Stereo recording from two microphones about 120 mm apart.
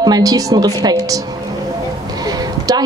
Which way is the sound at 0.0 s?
30° right (ahead or behind).